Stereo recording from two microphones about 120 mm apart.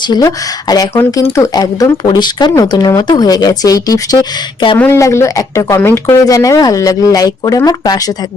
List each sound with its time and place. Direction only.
0.0 s speech: 35° left (ahead or behind)
4.8 s speech: 25° left (ahead or behind)